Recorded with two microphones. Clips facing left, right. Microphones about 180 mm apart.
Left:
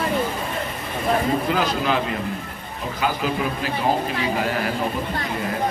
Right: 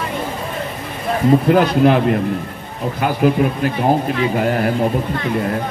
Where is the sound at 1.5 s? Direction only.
55° right (ahead or behind).